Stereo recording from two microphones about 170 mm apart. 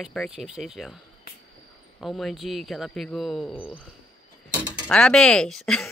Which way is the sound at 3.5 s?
30° left (ahead or behind).